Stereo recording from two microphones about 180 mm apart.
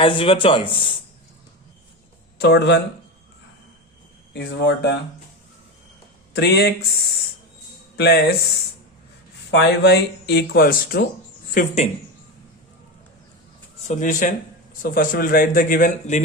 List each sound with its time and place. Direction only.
0.0 s speech: 30° left (ahead or behind)
2.4 s speech: 65° left (ahead or behind)
4.4 s speech: 70° left (ahead or behind)
6.3 s speech: 65° left (ahead or behind)
7.9 s speech: 65° left (ahead or behind)
9.5 s speech: 70° left (ahead or behind)
11.5 s speech: 40° left (ahead or behind)
13.8 s a man's voice: 45° left (ahead or behind)